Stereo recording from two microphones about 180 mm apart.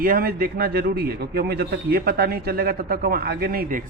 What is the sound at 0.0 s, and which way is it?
A man's voice, 55° right (ahead or behind).